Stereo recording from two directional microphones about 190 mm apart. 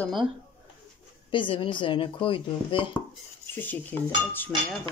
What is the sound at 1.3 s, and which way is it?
Speech, 25° left (ahead or behind).